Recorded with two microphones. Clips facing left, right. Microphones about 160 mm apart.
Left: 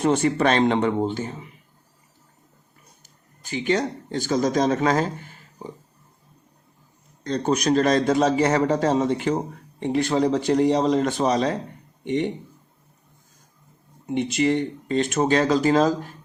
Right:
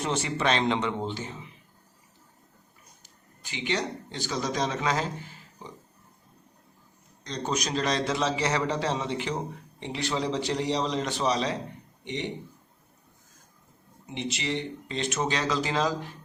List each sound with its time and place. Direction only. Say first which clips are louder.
0.0 s a man's voice: left 8 dB; 50° left (ahead or behind)
3.4 s speech: left 7 dB; 45° left (ahead or behind)
7.3 s a man's voice: left 9 dB; 55° left (ahead or behind)
14.1 s a man's voice: left 10 dB; 50° left (ahead or behind)